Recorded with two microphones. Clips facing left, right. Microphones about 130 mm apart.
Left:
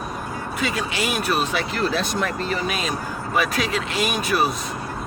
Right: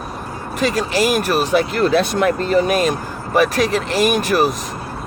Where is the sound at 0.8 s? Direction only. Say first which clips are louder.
Right 8 dB; 40° right (ahead or behind).